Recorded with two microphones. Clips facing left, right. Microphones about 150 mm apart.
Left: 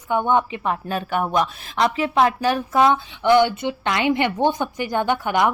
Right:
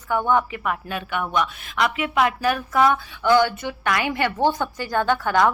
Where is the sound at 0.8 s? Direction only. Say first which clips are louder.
Left 4 dB; 35° left (ahead or behind).